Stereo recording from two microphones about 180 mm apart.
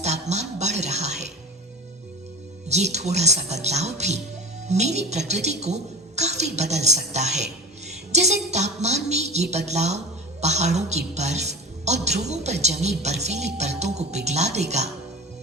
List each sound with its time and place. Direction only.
0.0 s a sound: 40° right (ahead or behind)
2.6 s a woman's voice: 40° right (ahead or behind)
7.1 s music: 40° right (ahead or behind)
8.4 s a woman's voice: 40° right (ahead or behind)